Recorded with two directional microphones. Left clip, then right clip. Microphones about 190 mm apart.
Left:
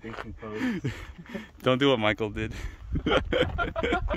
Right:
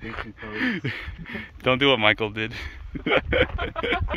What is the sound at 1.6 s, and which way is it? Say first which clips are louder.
Speech: right 4 dB; 20° left (ahead or behind).